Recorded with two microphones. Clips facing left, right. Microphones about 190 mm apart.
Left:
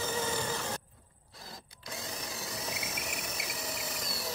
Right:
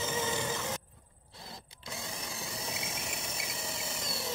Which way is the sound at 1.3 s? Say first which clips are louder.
Right 1 dB; 25° right (ahead or behind).